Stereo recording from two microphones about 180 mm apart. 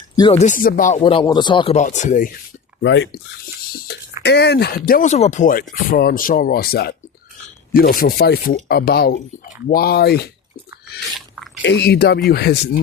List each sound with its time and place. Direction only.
0.2 s speech: 30° left (ahead or behind)
0.4 s speech: 45° left (ahead or behind)
0.9 s speech: 30° left (ahead or behind)
1.7 s speech: 40° left (ahead or behind)
2.8 s speech: 90° left
3.7 s a sound: 55° left (ahead or behind)
4.2 s speech: 70° left (ahead or behind)
11.6 s speech: 70° left (ahead or behind)